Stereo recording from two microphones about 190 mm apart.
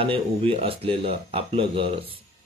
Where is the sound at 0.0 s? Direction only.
30° right (ahead or behind).